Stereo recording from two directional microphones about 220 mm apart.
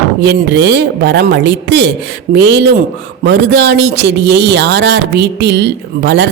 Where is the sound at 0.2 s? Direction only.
50° right (ahead or behind).